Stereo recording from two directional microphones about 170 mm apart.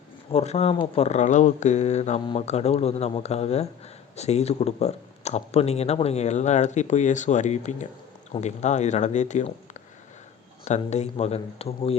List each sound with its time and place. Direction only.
0.3 s speech: 35° left (ahead or behind)
10.7 s speech: 40° left (ahead or behind)